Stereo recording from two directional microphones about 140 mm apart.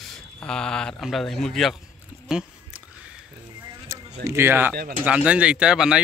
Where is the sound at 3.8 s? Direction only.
20° right (ahead or behind).